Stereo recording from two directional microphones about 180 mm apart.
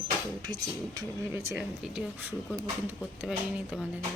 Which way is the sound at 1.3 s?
15° right (ahead or behind).